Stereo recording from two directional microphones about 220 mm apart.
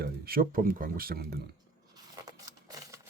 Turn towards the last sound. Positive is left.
turn(degrees=-15)  # may be behind; listen again after turning